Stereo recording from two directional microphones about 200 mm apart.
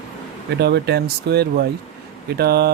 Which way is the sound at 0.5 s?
55° right (ahead or behind).